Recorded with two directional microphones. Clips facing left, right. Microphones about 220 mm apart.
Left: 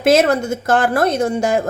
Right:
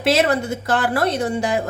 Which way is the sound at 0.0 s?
45° left (ahead or behind).